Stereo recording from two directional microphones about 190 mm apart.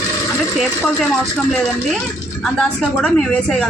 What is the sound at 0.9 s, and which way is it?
A woman's voice, centre (ahead or behind).